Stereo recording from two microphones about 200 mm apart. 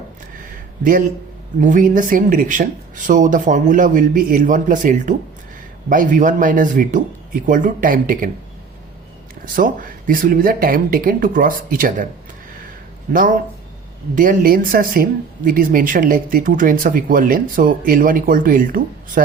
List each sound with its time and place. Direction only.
0.8 s speech: 40° right (ahead or behind)
9.6 s speech: 40° right (ahead or behind)
13.1 s speech: 40° right (ahead or behind)